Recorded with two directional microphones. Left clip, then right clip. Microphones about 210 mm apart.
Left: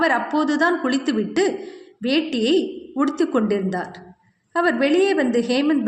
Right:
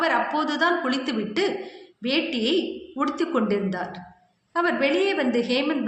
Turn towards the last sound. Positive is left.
turn(degrees=50)  # may be behind; listen again after turning